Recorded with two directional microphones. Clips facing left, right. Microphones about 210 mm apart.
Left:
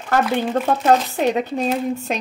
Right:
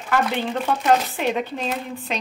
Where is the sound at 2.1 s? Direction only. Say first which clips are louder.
Right 1 dB; 45° left (ahead or behind).